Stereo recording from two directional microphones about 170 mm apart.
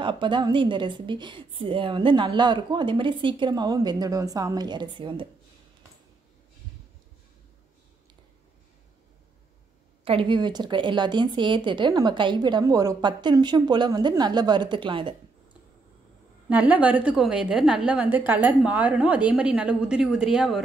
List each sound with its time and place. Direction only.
0.0 s a woman's voice: 30° right (ahead or behind)
10.0 s a woman's voice: 30° right (ahead or behind)
16.4 s a woman's voice: 10° right (ahead or behind)